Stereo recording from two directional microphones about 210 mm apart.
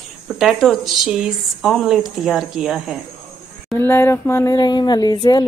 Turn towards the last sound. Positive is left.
turn(degrees=20)  # may be behind; listen again after turning